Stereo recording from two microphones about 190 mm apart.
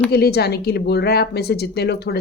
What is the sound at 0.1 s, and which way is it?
Speech, 55° left (ahead or behind).